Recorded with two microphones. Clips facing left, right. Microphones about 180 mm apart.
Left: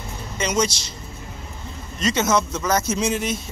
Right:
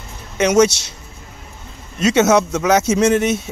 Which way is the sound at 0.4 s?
75° right (ahead or behind).